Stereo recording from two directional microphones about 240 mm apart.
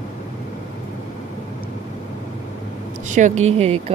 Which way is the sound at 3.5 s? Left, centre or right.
Right.